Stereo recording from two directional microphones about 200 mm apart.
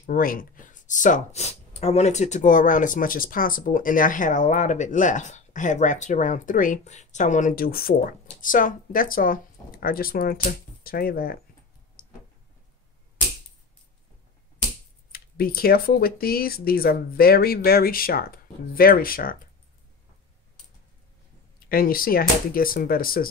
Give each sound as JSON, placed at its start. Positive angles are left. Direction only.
{"t": 0.0, "sound": "speech", "side_deg": 45}
{"t": 15.1, "sound": "speech", "side_deg": 50}
{"t": 21.6, "sound": "speech", "side_deg": 45}